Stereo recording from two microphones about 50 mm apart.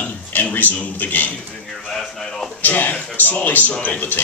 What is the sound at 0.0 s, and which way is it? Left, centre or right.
Speech, left.